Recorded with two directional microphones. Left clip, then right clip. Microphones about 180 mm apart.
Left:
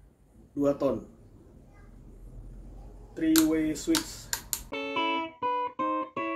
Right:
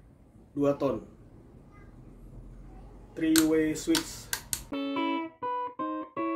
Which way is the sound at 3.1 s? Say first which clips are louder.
Even; centre (ahead or behind).